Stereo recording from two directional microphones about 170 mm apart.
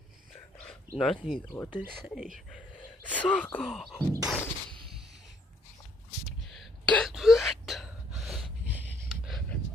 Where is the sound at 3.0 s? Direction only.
10° left (ahead or behind).